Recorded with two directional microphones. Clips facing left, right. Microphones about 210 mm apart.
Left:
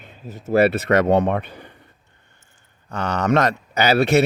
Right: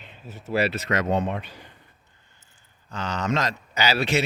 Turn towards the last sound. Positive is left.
turn(degrees=60)  # may be behind; listen again after turning